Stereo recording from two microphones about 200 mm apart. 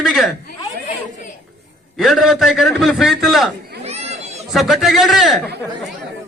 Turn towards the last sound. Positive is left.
turn(degrees=0)  # may be behind; listen again after turning